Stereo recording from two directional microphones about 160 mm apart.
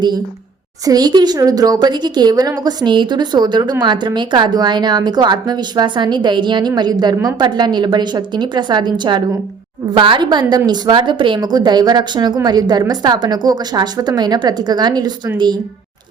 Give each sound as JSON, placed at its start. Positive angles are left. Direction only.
{"t": 0.9, "sound": "a woman's voice", "side_deg": -25}